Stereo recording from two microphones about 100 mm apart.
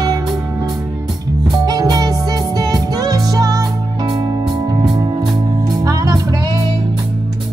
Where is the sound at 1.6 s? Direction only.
40° right (ahead or behind).